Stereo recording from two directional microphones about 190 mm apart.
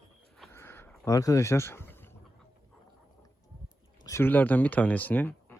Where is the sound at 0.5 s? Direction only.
15° left (ahead or behind).